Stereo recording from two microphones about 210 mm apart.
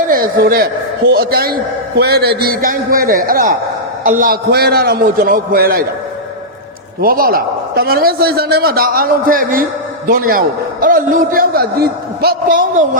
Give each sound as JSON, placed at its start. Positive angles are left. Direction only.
{"t": 0.1, "sound": "a man's voice", "side_deg": -45}
{"t": 7.0, "sound": "a man's voice", "side_deg": -45}